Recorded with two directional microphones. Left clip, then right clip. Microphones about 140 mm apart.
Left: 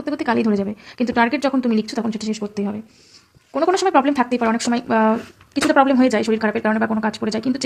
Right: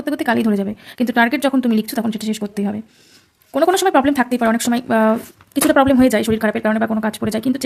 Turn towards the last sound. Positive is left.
turn(degrees=-45)  # may be behind; listen again after turning